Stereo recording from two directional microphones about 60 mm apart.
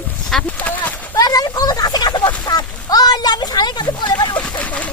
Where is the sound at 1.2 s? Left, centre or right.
Left.